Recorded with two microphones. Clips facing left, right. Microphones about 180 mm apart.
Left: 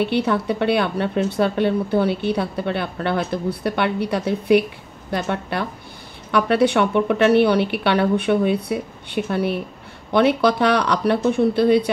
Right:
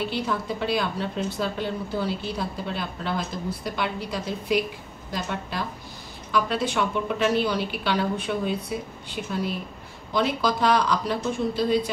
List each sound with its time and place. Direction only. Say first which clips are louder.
0.0 s speech: left 8 dB; 65° left (ahead or behind)